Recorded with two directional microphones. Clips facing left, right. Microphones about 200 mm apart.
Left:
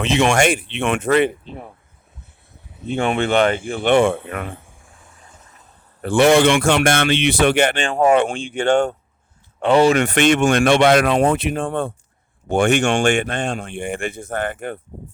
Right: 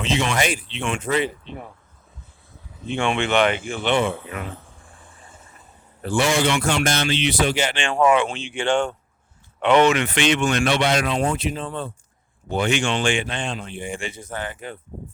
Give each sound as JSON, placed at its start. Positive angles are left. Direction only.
{"t": 0.0, "sound": "a man's voice", "side_deg": 65}
{"t": 2.9, "sound": "a man's voice", "side_deg": 40}
{"t": 4.9, "sound": "vehicle", "side_deg": 0}
{"t": 6.0, "sound": "a man's voice", "side_deg": 60}
{"t": 7.8, "sound": "speech", "side_deg": 40}
{"t": 12.6, "sound": "a man's voice", "side_deg": 65}
{"t": 13.1, "sound": "a man's voice", "side_deg": 50}